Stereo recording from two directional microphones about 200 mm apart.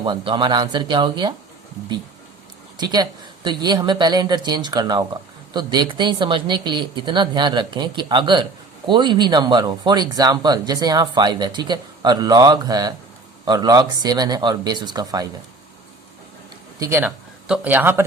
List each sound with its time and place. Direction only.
0.0 s speech: 25° right (ahead or behind)
2.7 s speech: 20° right (ahead or behind)
16.8 s speech: 10° right (ahead or behind)